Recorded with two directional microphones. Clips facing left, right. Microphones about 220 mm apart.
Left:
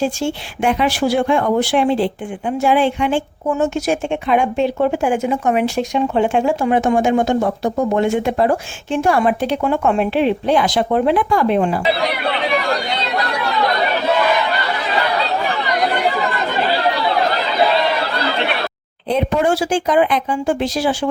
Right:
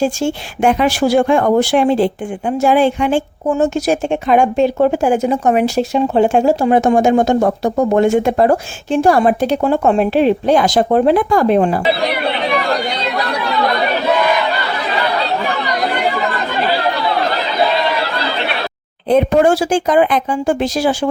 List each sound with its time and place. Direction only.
0.0 s speech: 45° right (ahead or behind)
19.0 s speech: 50° right (ahead or behind)